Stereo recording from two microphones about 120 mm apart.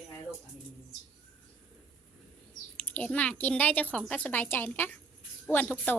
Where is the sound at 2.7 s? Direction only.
15° left (ahead or behind).